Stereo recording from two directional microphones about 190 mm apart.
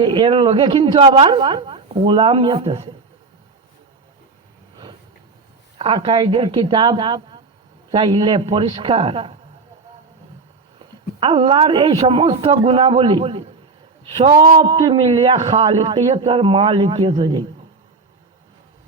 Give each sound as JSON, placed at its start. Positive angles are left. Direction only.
{"t": 0.0, "sound": "a woman's voice", "side_deg": -25}
{"t": 5.7, "sound": "a woman's voice", "side_deg": -30}
{"t": 10.8, "sound": "a woman's voice", "side_deg": -30}